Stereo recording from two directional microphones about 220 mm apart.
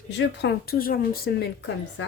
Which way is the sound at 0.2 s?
50° left (ahead or behind).